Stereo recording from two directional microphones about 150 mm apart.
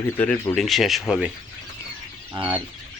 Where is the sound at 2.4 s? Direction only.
35° right (ahead or behind).